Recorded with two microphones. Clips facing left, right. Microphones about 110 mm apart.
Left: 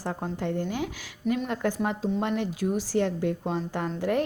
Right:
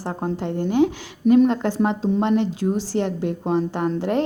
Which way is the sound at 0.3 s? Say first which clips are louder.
Right 12 dB; 20° right (ahead or behind).